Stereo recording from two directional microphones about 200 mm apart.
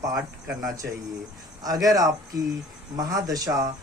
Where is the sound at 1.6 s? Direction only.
20° right (ahead or behind).